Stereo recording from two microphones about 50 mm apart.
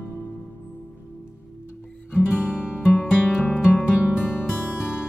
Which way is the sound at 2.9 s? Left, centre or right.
Left.